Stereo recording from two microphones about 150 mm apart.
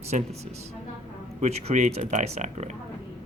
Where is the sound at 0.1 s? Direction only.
55° right (ahead or behind).